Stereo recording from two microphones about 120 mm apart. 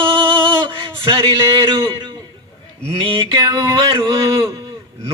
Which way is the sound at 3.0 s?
45° right (ahead or behind).